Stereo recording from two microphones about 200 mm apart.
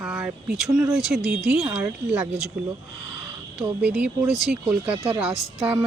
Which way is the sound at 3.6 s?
5° right (ahead or behind).